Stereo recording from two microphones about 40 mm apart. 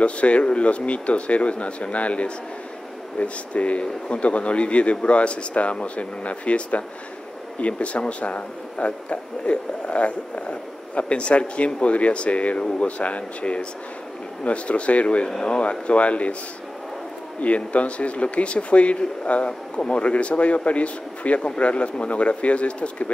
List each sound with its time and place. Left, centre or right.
0.0 s speech: left
15.2 s speech: centre
15.6 s speech: left
17.4 s speech: left